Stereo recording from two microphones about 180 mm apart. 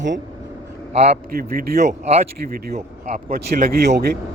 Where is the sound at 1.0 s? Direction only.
60° right (ahead or behind).